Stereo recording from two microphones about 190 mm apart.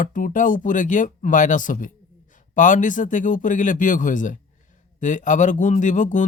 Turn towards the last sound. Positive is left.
turn(degrees=40)  # may be behind; listen again after turning